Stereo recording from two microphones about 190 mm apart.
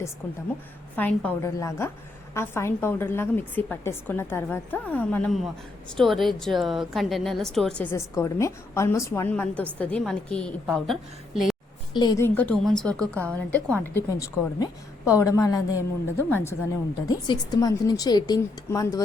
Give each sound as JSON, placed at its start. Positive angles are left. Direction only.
{"t": 0.9, "sound": "a woman's voice", "side_deg": 10}
{"t": 11.9, "sound": "a woman's voice", "side_deg": 20}